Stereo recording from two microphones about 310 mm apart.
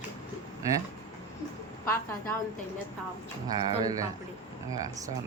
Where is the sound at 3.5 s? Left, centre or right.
Centre.